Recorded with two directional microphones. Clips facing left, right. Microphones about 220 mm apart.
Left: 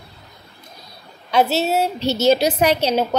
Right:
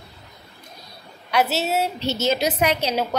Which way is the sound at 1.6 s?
30° left (ahead or behind).